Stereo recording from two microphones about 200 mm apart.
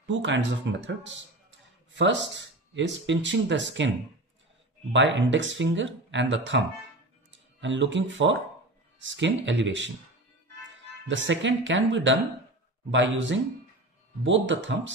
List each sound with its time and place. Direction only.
0.0 s speech: 65° right (ahead or behind)
4.9 s speech: 70° right (ahead or behind)
11.1 s speech: 65° right (ahead or behind)